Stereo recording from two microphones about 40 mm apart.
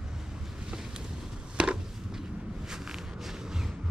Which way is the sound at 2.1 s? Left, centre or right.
Centre.